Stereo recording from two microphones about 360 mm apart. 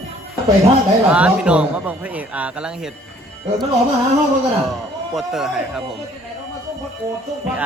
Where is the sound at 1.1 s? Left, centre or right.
Centre.